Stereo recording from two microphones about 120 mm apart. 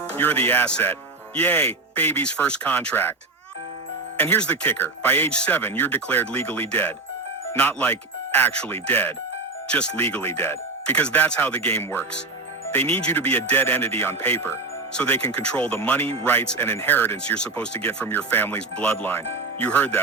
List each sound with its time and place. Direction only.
0.2 s speech: 15° left (ahead or behind)
4.2 s speech: 15° left (ahead or behind)